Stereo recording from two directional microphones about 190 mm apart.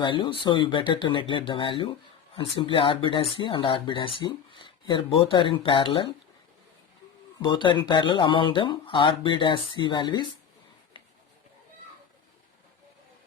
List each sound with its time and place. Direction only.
0.0 s speech: 25° left (ahead or behind)
7.3 s speech: 25° left (ahead or behind)